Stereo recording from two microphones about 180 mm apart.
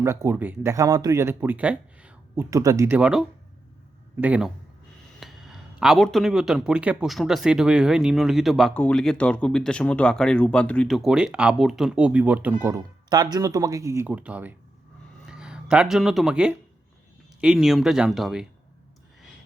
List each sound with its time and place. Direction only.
0.0 s speech: 15° right (ahead or behind)
13.1 s speech: 20° right (ahead or behind); by 18.4 s centre (ahead or behind)